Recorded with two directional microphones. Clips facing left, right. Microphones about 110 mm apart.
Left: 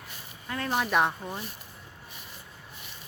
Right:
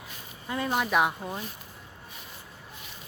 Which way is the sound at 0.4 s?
15° right (ahead or behind).